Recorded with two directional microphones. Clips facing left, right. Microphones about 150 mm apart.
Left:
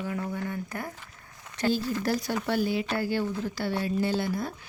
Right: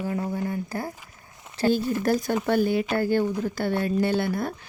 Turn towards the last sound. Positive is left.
turn(degrees=-60)  # may be behind; listen again after turning